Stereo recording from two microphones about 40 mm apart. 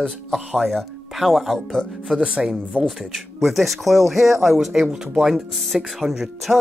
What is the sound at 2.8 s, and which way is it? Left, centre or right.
Speech, right.